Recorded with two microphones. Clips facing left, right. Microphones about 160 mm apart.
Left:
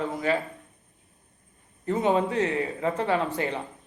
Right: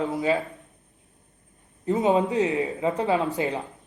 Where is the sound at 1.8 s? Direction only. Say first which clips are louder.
Right 2 dB; 20° right (ahead or behind).